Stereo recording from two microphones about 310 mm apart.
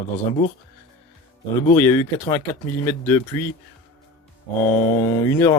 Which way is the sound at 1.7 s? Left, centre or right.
Centre.